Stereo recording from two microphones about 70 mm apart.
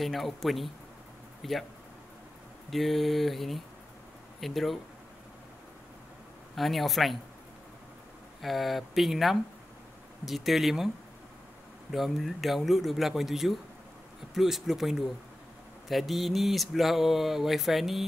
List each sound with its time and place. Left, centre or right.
0.0 s mantra: centre
1.4 s speech: centre
2.7 s mantra: centre
6.5 s mantra: centre
8.4 s mantra: centre
11.9 s mantra: centre